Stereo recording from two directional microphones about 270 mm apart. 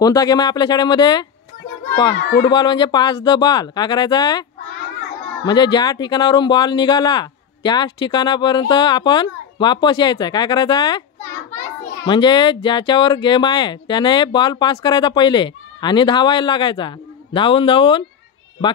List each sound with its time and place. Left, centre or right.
0.0 s a man's voice: centre